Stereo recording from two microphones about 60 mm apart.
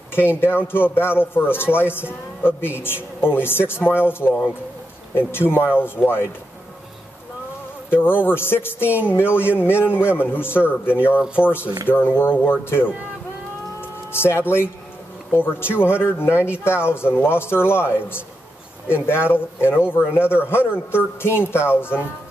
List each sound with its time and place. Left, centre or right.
0.1 s speech: left
7.9 s speech: left
11.1 s speech: right
11.9 s speech: left
13.7 s music: left
15.3 s speech: left
19.3 s speech: left